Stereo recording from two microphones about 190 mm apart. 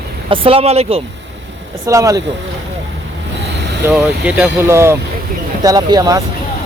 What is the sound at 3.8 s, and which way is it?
Speech, 5° right (ahead or behind).